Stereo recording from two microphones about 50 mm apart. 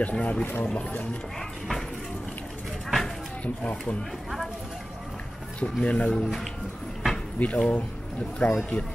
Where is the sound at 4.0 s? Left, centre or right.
Centre.